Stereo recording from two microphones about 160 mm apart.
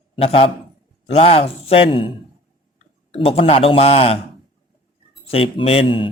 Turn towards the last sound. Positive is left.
turn(degrees=35)  # may be behind; listen again after turning